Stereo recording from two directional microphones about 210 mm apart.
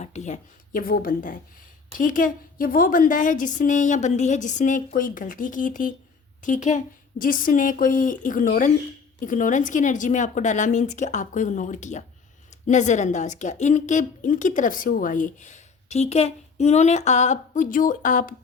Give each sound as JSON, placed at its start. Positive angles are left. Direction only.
{"t": 0.0, "sound": "speech", "side_deg": 35}